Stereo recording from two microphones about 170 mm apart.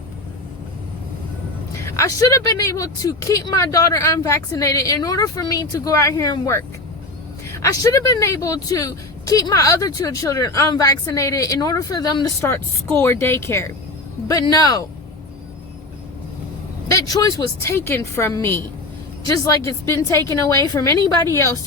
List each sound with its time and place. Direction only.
1.8 s speech: 15° left (ahead or behind)
16.9 s a woman's voice: 20° left (ahead or behind)